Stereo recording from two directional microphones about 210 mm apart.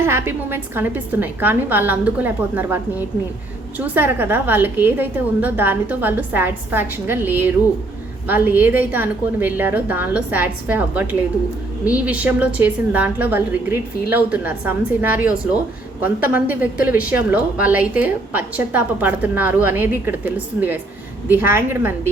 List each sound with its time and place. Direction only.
0.0 s a woman's voice: 10° right (ahead or behind)